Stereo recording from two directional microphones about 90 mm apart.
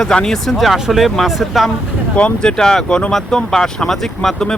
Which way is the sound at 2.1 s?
10° left (ahead or behind).